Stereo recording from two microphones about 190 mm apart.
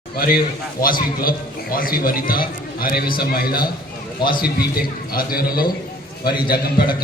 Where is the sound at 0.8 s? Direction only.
50° left (ahead or behind).